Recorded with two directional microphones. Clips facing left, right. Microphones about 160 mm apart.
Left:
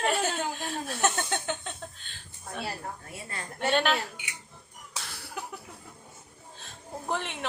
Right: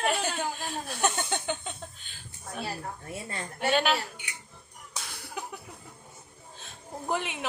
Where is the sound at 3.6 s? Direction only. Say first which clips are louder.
Even; 5° right (ahead or behind).